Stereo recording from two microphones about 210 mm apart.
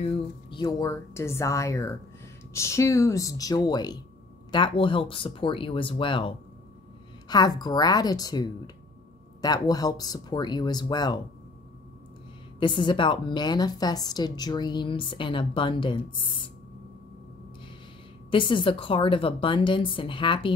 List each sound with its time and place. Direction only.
0.0 s a woman's voice: 20° left (ahead or behind)
12.5 s a woman's voice: 20° left (ahead or behind)
18.3 s a woman's voice: 25° left (ahead or behind)